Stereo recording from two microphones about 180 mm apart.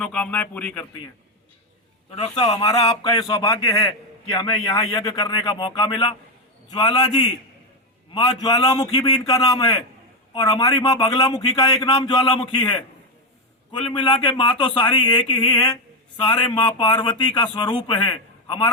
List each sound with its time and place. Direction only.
0.0 s speech: 5° left (ahead or behind)
2.0 s a man's voice: 30° left (ahead or behind)
7.1 s a man's voice: 35° left (ahead or behind)
8.1 s a man's voice: 20° left (ahead or behind)